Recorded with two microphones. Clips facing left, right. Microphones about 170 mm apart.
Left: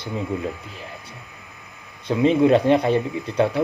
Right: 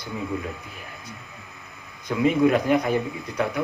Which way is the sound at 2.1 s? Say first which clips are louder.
Left 3 dB; 25° left (ahead or behind).